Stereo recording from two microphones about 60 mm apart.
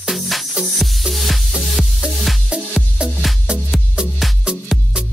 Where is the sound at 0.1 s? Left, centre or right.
Centre.